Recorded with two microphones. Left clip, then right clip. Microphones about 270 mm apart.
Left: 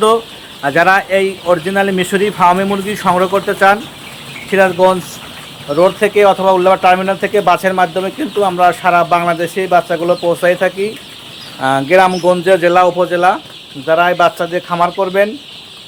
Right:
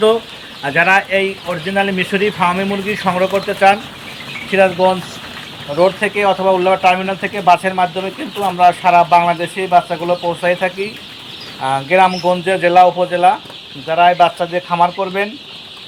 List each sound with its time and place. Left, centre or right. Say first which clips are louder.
0.6 s speech: left 2 dB; centre